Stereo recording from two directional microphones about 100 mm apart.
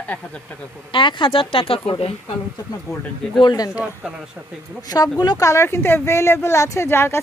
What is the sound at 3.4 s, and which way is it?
Speech, 40° left (ahead or behind).